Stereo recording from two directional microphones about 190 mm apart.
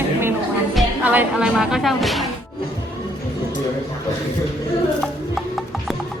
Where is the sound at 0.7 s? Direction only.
5° right (ahead or behind).